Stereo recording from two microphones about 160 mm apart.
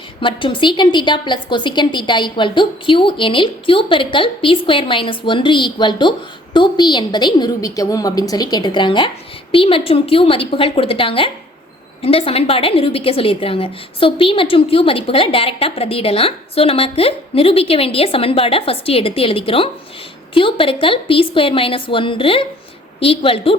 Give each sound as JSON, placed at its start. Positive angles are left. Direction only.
{"t": 0.2, "sound": "a woman's voice", "side_deg": 30}